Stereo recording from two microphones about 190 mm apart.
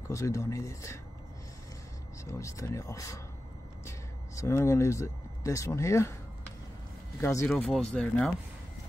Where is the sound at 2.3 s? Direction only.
15° left (ahead or behind).